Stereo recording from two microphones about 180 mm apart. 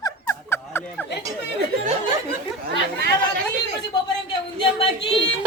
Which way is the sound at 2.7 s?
65° right (ahead or behind).